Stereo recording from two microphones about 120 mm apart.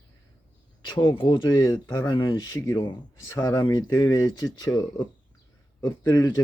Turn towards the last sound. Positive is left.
turn(degrees=35)  # may be behind; listen again after turning